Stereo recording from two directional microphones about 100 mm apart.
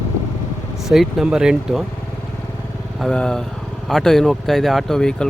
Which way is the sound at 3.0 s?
10° left (ahead or behind).